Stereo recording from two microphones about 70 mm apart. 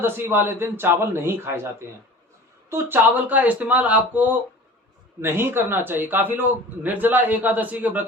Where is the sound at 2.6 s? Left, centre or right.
Right.